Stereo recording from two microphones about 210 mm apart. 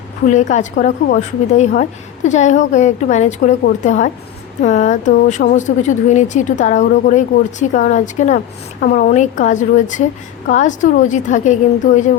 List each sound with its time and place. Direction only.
0.3 s a woman's voice: 35° left (ahead or behind)